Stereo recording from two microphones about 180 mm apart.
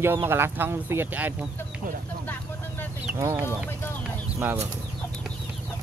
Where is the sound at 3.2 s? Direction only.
15° right (ahead or behind).